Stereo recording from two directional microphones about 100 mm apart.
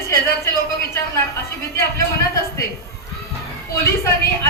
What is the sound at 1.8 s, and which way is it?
Speech, 30° left (ahead or behind).